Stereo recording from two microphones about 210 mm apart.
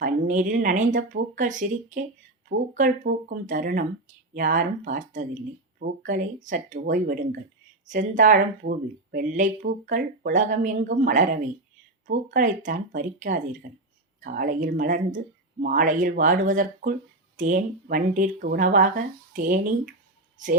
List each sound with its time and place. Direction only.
0.0 s speech: 40° right (ahead or behind)